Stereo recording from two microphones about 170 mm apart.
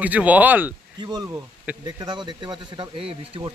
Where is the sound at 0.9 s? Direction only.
25° right (ahead or behind).